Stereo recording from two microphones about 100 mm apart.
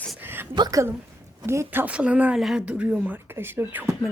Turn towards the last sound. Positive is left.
turn(degrees=-25)  # may be behind; listen again after turning